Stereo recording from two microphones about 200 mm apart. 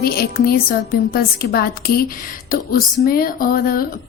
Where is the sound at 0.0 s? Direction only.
50° left (ahead or behind).